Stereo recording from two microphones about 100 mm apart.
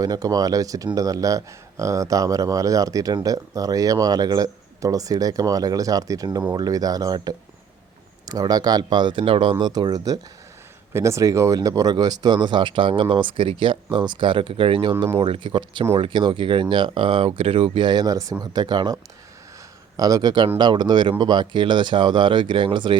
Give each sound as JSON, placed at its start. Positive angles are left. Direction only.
{"t": 0.0, "sound": "a man's voice", "side_deg": -35}
{"t": 18.5, "sound": "speech", "side_deg": -45}
{"t": 20.0, "sound": "a man's voice", "side_deg": -40}